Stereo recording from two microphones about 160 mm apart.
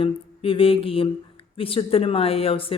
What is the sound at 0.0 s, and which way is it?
Speech, 35° left (ahead or behind).